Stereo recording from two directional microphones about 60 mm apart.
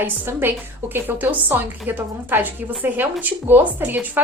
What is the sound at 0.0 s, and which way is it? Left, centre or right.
A woman's voice, right.